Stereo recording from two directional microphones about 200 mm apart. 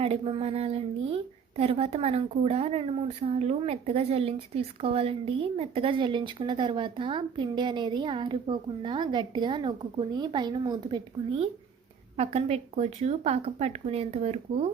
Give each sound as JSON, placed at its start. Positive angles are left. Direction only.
{"t": 0.0, "sound": "a woman's voice", "side_deg": -30}